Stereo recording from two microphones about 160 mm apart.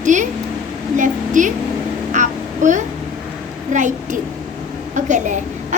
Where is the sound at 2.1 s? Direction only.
50° right (ahead or behind).